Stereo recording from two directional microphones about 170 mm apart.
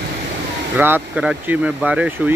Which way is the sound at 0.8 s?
10° right (ahead or behind).